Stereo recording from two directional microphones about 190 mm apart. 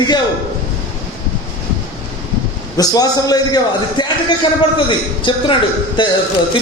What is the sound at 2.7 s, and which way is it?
A man's voice, 20° left (ahead or behind).